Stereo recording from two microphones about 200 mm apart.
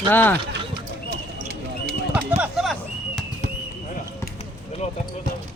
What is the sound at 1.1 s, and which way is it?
Basketball bounce, 55° right (ahead or behind).